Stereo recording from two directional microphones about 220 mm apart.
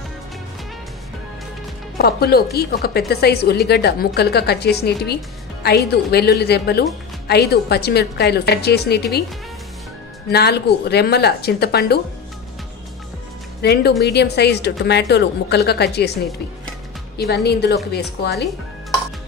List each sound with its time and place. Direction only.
2.0 s a woman's voice: 45° left (ahead or behind)
10.3 s a woman's voice: 45° left (ahead or behind)
13.6 s a woman's voice: 45° left (ahead or behind)